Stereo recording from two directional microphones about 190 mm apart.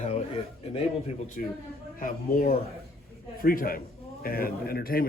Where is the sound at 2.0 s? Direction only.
45° left (ahead or behind).